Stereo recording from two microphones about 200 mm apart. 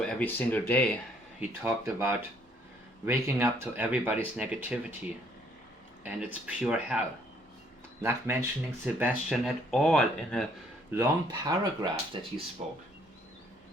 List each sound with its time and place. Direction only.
0.0 s speech: 5° left (ahead or behind)
1.4 s speech: 10° right (ahead or behind)
6.0 s speech: 5° right (ahead or behind)
8.0 s speech: 10° right (ahead or behind)
10.9 s speech: 10° right (ahead or behind)
11.3 s speech: 20° right (ahead or behind)